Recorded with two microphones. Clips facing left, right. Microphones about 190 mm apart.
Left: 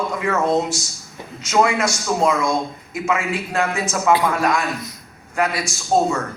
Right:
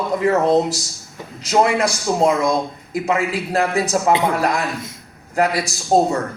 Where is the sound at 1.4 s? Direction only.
35° right (ahead or behind).